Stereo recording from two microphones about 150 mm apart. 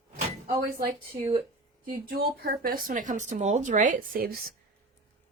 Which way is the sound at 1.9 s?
80° right.